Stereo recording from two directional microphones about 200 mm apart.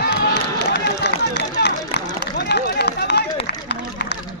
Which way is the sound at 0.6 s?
60° left (ahead or behind).